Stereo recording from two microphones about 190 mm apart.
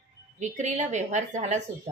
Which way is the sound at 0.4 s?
40° right (ahead or behind).